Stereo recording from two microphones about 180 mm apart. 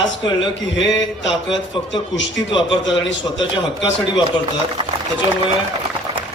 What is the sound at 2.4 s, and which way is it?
Speech, 25° left (ahead or behind).